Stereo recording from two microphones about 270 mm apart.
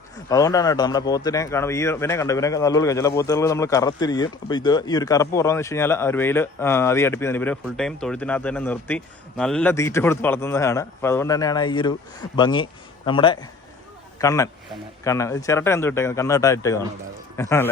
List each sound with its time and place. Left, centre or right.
0.3 s a man's voice: centre